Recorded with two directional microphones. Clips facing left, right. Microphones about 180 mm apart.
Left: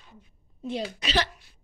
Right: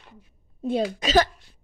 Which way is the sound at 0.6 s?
50° right (ahead or behind).